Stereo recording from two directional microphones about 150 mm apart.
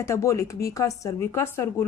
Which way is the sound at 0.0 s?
20° left (ahead or behind).